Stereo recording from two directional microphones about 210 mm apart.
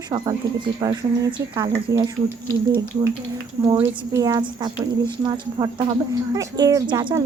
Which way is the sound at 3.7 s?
20° right (ahead or behind).